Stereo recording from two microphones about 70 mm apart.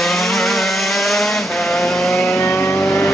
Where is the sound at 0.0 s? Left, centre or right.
Centre.